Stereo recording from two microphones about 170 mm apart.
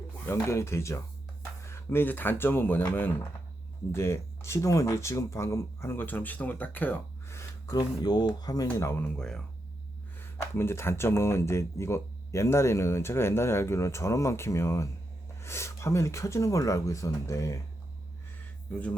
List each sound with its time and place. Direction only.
0.3 s speech: 15° left (ahead or behind)
10.5 s speech: 15° left (ahead or behind)
18.7 s speech: 5° left (ahead or behind)